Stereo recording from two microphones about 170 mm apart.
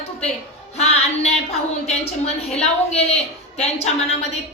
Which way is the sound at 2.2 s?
40° left (ahead or behind).